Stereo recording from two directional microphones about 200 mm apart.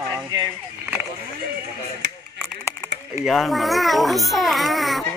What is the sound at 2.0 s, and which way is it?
Chop, 55° right (ahead or behind).